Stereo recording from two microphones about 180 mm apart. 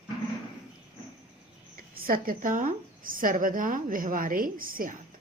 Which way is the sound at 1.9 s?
55° right (ahead or behind).